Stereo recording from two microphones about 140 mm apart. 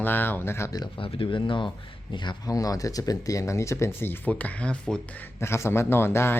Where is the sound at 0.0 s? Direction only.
15° left (ahead or behind).